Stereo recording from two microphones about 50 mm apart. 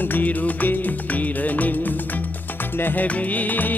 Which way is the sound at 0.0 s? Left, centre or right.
Left.